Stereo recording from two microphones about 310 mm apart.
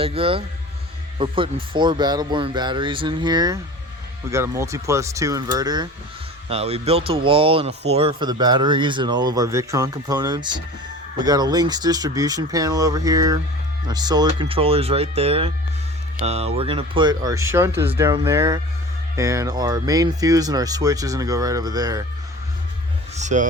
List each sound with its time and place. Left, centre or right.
0.0 s speech: centre
23.1 s speech: right